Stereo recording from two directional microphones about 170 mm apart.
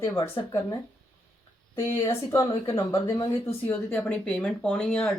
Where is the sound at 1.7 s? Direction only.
15° left (ahead or behind).